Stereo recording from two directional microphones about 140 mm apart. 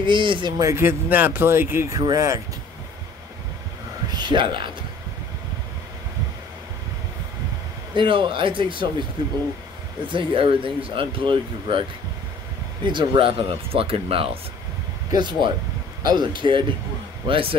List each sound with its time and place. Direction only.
0.0 s speech: 35° right (ahead or behind)
4.2 s speech: 35° right (ahead or behind)
7.9 s speech: 35° right (ahead or behind)
12.8 s speech: 35° right (ahead or behind)
15.0 s speech: 30° right (ahead or behind)